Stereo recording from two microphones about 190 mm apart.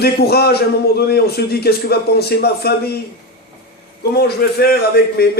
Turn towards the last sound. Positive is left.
turn(degrees=55)  # may be behind; listen again after turning